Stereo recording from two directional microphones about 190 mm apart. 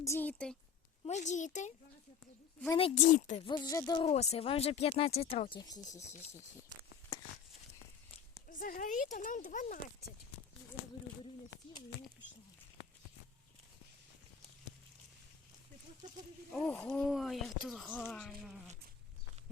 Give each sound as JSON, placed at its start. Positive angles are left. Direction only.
{"t": 0.0, "sound": "speech", "side_deg": 10}
{"t": 1.0, "sound": "speech", "side_deg": 40}
{"t": 2.7, "sound": "speech", "side_deg": 35}
{"t": 3.4, "sound": "speech", "side_deg": 20}
{"t": 4.0, "sound": "speech", "side_deg": 35}
{"t": 8.4, "sound": "speech", "side_deg": 45}
{"t": 16.5, "sound": "speech", "side_deg": 5}